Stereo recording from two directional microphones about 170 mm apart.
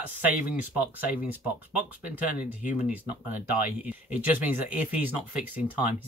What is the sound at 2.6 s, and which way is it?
Speech, 10° right (ahead or behind).